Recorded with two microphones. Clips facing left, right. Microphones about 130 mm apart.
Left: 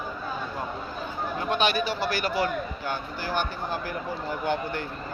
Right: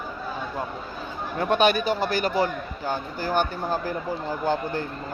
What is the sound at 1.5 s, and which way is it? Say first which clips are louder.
A man's voice: right 5 dB; 50° right (ahead or behind).